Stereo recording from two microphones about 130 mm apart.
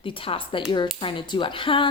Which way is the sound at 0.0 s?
45° left (ahead or behind).